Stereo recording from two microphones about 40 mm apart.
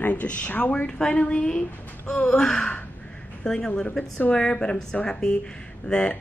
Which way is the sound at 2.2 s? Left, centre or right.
Centre.